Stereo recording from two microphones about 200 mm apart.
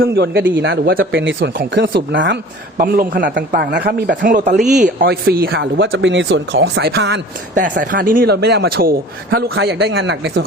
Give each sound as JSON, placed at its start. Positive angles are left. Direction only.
{"t": 0.0, "sound": "speech", "side_deg": -55}
{"t": 2.7, "sound": "a man's voice", "side_deg": -45}
{"t": 3.2, "sound": "a man's voice", "side_deg": -55}
{"t": 7.5, "sound": "a man's voice", "side_deg": -40}